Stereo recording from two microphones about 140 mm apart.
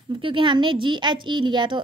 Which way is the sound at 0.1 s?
35° right (ahead or behind).